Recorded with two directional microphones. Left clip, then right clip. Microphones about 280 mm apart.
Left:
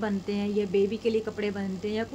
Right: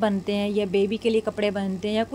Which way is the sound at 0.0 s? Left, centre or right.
Right.